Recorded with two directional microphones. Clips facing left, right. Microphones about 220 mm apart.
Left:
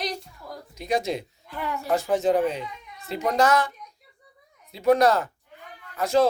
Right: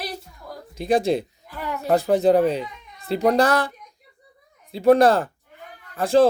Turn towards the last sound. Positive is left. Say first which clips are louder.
# right 4 dB
turn(degrees=-30)  # may be behind; listen again after turning